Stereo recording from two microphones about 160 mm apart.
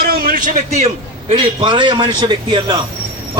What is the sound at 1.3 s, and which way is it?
A man's voice, 30° right (ahead or behind).